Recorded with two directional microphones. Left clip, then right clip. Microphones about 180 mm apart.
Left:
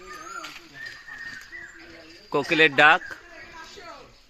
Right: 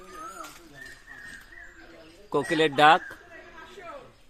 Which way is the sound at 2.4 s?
5° right (ahead or behind).